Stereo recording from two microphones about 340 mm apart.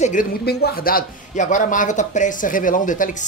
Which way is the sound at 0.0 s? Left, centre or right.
Left.